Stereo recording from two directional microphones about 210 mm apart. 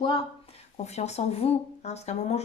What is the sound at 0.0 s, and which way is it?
A woman's voice, 25° left (ahead or behind).